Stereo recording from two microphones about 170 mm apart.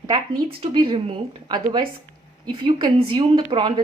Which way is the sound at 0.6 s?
30° right (ahead or behind).